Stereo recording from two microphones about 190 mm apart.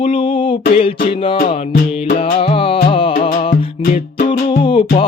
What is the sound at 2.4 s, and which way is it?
Music, 30° left (ahead or behind).